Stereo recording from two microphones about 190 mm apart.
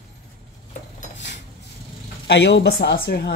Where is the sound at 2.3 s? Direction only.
65° left (ahead or behind).